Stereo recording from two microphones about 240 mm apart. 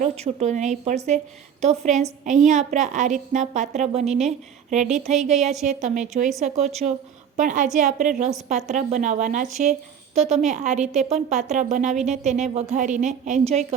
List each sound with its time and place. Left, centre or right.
0.0 s a woman's voice: right